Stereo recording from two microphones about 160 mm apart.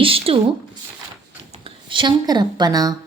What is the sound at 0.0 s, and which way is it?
Speech, 35° right (ahead or behind).